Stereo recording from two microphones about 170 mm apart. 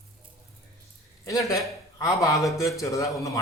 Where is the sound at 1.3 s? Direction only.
20° left (ahead or behind).